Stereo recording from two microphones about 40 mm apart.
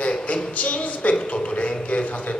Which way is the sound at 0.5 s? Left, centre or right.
Left.